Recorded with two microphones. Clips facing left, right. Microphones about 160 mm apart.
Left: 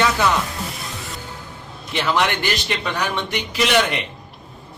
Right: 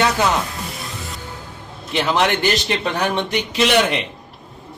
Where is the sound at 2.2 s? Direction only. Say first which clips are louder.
Right 4 dB; 30° right (ahead or behind).